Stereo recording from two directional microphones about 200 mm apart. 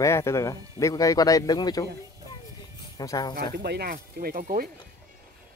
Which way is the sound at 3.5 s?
55° right (ahead or behind).